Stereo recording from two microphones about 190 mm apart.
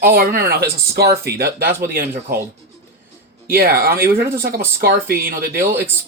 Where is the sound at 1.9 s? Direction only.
50° right (ahead or behind).